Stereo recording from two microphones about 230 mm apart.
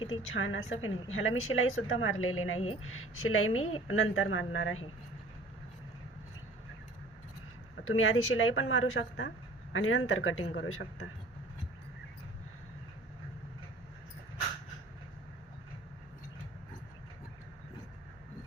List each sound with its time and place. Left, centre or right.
0.1 s a woman's voice: left
7.9 s a woman's voice: left